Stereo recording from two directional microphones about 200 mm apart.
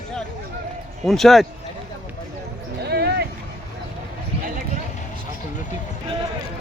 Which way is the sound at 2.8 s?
55° right (ahead or behind).